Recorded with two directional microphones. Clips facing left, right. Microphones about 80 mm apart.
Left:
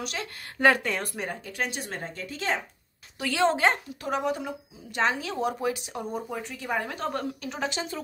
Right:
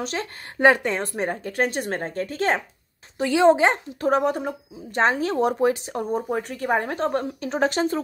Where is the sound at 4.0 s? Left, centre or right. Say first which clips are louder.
Right 9 dB; right.